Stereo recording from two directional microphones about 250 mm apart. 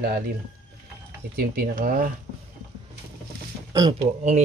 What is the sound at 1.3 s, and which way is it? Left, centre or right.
Cutlery, right.